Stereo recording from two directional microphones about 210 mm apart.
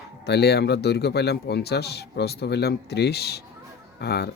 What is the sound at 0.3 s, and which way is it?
Speech, 50° left (ahead or behind).